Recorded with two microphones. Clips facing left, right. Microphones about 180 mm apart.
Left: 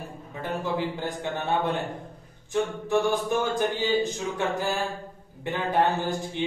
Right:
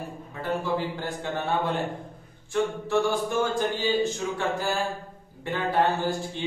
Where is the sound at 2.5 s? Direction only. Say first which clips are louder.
Even; 15° left (ahead or behind).